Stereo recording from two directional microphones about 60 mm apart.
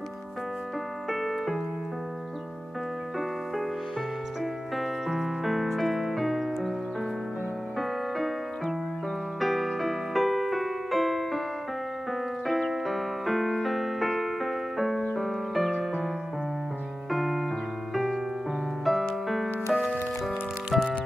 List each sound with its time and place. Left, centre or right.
1.1 s keyboard: centre
4.7 s music: centre
9.4 s music: centre
12.1 s keyboard: centre
15.1 s music: centre
17.1 s music: centre